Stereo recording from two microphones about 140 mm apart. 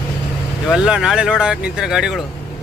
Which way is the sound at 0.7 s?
5° right (ahead or behind).